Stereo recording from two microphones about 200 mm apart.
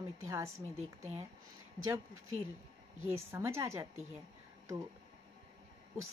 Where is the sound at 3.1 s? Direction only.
15° right (ahead or behind).